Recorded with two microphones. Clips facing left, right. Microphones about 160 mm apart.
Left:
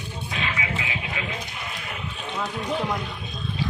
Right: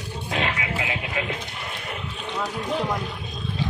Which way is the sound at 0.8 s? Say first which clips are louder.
Right 3 dB; 55° right (ahead or behind).